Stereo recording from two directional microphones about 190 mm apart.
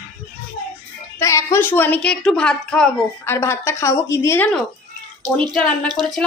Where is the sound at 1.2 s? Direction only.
15° left (ahead or behind).